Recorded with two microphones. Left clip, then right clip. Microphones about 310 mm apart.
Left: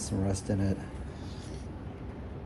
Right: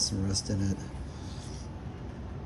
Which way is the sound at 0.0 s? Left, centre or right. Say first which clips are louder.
Right 2 dB; left.